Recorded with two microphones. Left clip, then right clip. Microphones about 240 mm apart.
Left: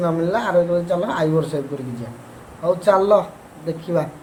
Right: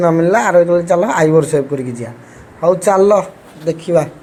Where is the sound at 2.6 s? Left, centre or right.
Right.